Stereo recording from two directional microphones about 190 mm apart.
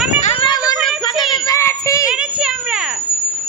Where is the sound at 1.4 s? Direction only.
15° left (ahead or behind).